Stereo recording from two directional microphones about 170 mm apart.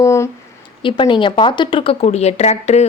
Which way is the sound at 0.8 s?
30° left (ahead or behind).